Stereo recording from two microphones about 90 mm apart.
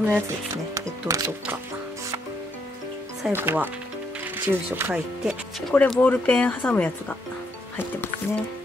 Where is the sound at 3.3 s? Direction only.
25° right (ahead or behind).